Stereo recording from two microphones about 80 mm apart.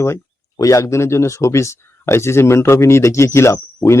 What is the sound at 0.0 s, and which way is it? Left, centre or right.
Speech, left.